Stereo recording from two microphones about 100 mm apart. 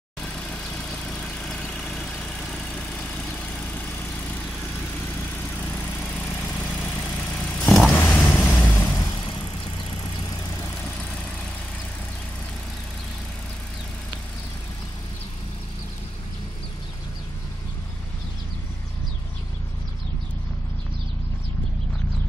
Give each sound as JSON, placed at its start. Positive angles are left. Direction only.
{"t": 0.2, "sound": "vehicle", "side_deg": 10}
{"t": 5.5, "sound": "vehicle", "side_deg": 15}
{"t": 7.9, "sound": "vehicle", "side_deg": 15}
{"t": 9.0, "sound": "vehicle", "side_deg": 45}